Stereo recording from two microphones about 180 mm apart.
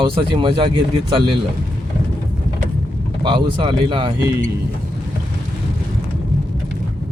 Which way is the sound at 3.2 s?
25° right (ahead or behind).